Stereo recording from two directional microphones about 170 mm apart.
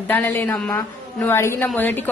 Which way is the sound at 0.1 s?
10° left (ahead or behind).